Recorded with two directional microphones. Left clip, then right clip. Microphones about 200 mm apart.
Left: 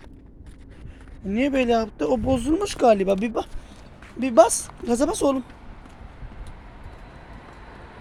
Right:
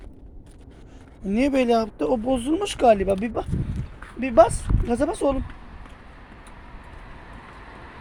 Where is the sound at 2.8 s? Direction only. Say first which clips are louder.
Even; 20° left (ahead or behind).